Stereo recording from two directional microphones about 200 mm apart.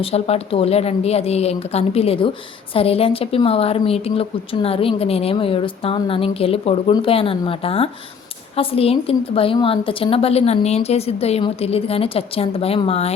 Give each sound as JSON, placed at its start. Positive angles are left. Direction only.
{"t": 0.0, "sound": "a woman's voice", "side_deg": 30}